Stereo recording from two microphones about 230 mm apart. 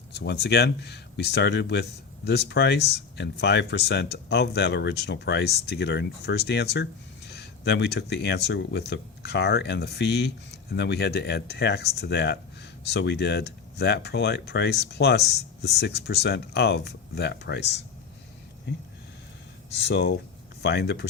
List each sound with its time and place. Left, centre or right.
0.1 s speech: left
19.7 s speech: left